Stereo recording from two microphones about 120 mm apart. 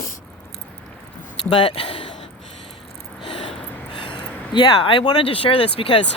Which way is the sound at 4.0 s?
45° left (ahead or behind).